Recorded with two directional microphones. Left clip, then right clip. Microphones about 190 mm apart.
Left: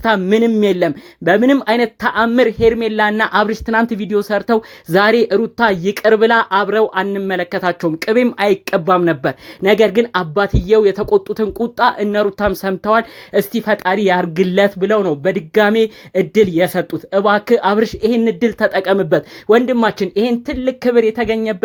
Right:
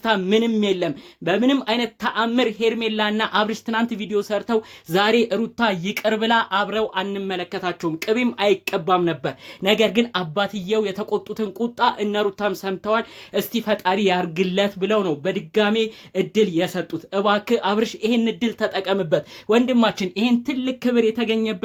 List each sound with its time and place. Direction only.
0.0 s speech: 30° left (ahead or behind)